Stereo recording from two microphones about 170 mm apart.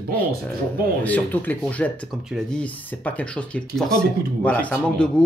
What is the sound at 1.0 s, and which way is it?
Speech, 10° left (ahead or behind).